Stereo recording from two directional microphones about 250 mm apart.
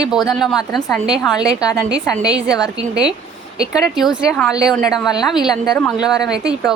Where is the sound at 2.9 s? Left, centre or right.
Centre.